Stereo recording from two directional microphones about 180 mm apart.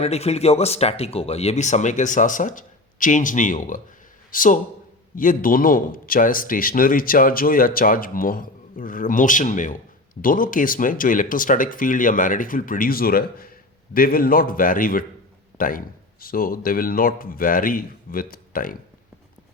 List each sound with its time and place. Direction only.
0.0 s a man's voice: 35° left (ahead or behind); by 18.8 s 50° left (ahead or behind)